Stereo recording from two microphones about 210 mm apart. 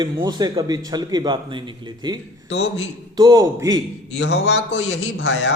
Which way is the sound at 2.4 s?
65° left (ahead or behind).